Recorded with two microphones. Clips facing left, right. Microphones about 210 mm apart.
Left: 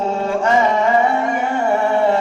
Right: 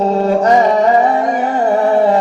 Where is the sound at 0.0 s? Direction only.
40° right (ahead or behind).